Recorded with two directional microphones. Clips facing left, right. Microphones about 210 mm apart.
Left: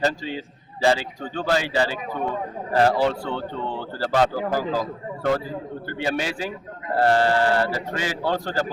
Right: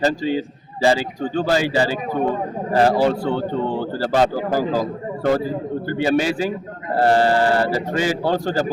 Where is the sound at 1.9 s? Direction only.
40° right (ahead or behind).